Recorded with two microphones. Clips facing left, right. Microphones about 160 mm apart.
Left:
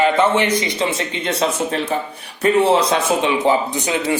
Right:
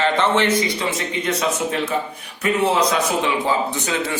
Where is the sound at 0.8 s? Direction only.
30° left (ahead or behind).